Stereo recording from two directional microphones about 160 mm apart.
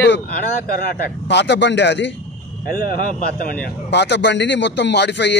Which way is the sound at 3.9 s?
90° left.